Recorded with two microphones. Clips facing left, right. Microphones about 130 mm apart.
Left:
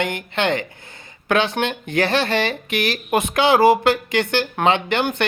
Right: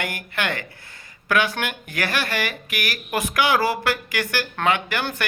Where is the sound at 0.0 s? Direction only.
20° left (ahead or behind).